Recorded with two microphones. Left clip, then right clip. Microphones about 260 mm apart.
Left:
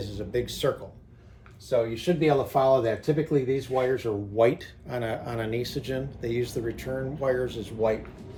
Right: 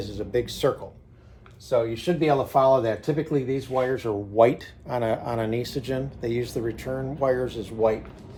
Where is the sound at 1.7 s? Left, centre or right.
Centre.